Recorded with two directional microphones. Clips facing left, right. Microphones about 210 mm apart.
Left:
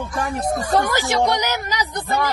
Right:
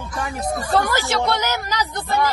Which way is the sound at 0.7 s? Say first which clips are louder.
Left 1 dB; 15° left (ahead or behind).